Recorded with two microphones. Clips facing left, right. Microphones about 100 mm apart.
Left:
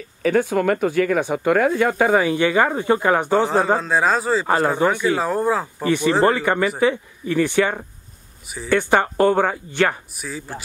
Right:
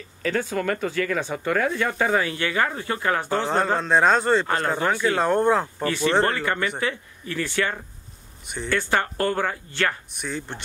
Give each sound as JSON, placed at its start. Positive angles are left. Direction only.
{"t": 0.2, "sound": "speech", "side_deg": 10}
{"t": 3.4, "sound": "a man's voice", "side_deg": 5}
{"t": 5.9, "sound": "speech", "side_deg": 15}
{"t": 10.1, "sound": "a man's voice", "side_deg": 0}